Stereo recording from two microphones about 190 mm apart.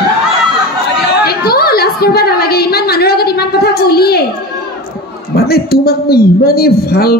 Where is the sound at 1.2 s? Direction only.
55° left (ahead or behind).